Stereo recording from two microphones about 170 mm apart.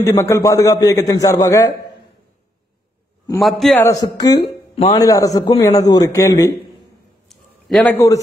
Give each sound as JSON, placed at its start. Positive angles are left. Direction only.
{"t": 0.0, "sound": "a man's voice", "side_deg": 15}
{"t": 3.3, "sound": "a man's voice", "side_deg": 0}
{"t": 3.8, "sound": "a man's voice", "side_deg": 20}
{"t": 7.2, "sound": "a sound", "side_deg": 0}